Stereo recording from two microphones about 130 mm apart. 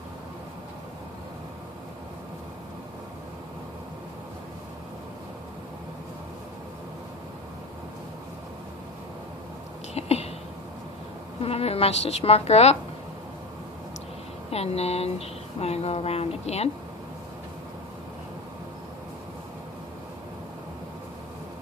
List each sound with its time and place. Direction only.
9.9 s a sound: 55° left (ahead or behind)
11.4 s speech: 50° left (ahead or behind)
14.5 s speech: 50° left (ahead or behind)